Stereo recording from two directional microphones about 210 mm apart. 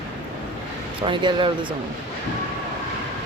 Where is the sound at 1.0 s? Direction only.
25° right (ahead or behind).